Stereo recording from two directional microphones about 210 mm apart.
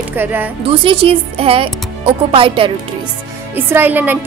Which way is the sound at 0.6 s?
25° right (ahead or behind).